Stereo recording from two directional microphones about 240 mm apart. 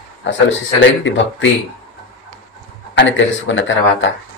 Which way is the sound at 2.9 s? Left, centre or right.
Left.